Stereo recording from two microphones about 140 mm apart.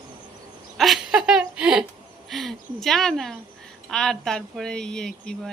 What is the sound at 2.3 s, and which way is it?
Speech, centre (ahead or behind).